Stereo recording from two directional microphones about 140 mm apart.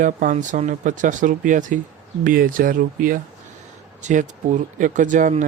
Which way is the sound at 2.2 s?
80° right.